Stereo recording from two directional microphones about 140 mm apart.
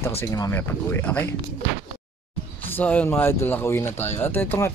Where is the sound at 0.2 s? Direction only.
20° left (ahead or behind).